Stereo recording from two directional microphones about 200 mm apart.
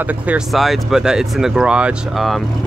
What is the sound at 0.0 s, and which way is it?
Speech, 5° right (ahead or behind).